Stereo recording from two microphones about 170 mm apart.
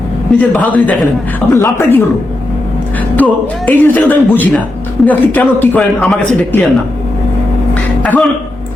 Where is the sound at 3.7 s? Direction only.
10° left (ahead or behind).